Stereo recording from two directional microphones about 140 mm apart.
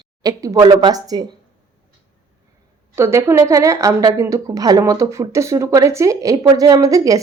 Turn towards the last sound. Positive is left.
turn(degrees=-25)  # may be behind; listen again after turning